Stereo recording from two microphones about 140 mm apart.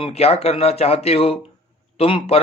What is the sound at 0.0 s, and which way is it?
Speech, 45° left (ahead or behind).